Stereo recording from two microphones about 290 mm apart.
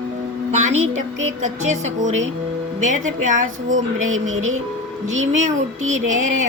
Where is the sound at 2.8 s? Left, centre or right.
Right.